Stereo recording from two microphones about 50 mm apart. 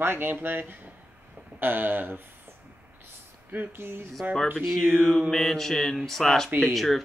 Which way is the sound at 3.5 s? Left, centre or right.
Right.